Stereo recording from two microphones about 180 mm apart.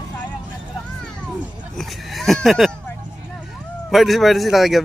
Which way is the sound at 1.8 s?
Centre (ahead or behind).